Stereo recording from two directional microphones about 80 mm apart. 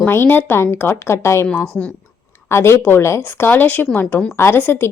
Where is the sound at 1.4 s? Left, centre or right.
Centre.